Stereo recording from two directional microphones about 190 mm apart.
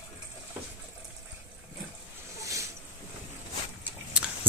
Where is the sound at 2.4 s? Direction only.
15° right (ahead or behind).